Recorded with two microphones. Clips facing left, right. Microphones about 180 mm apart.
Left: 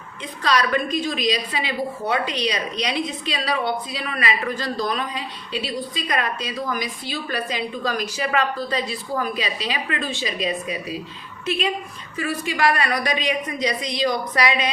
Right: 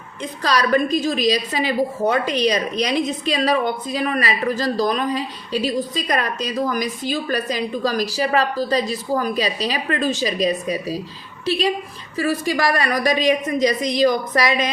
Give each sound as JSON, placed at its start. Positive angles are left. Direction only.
{"t": 0.2, "sound": "a woman's voice", "side_deg": -40}